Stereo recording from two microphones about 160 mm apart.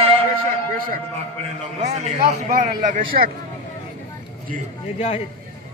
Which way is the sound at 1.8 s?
45° right (ahead or behind).